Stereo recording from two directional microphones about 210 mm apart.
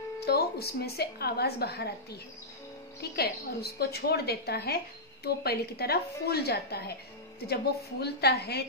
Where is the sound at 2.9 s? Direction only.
50° left (ahead or behind).